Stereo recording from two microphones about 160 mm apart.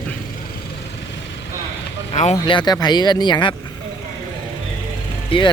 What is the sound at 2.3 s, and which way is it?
Speech, 25° left (ahead or behind).